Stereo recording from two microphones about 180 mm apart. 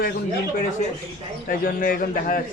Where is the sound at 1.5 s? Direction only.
50° left (ahead or behind).